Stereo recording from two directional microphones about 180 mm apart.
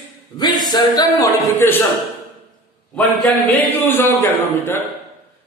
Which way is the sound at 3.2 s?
10° left (ahead or behind).